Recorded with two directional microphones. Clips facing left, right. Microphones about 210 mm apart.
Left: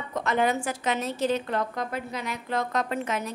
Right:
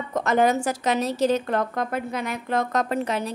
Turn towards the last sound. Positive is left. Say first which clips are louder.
# right 4 dB
turn(degrees=-35)  # may be behind; listen again after turning